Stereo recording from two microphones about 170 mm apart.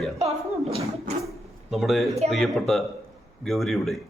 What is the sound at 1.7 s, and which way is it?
A man's voice, centre (ahead or behind).